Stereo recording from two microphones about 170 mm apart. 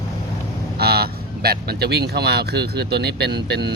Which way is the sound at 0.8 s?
65° right (ahead or behind).